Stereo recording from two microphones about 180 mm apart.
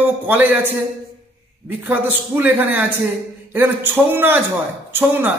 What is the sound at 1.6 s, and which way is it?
A man's voice, 10° right (ahead or behind).